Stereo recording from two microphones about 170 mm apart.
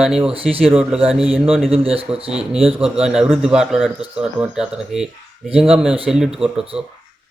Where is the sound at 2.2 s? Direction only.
5° right (ahead or behind).